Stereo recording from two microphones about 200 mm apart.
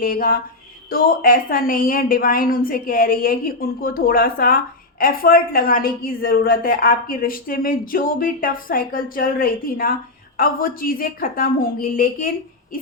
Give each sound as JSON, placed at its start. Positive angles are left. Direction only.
{"t": 0.0, "sound": "a woman's voice", "side_deg": 45}